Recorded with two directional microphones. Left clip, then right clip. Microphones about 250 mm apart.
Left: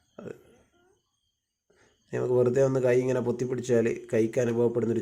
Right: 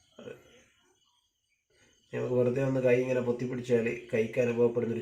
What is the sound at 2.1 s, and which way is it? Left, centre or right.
Speech, left.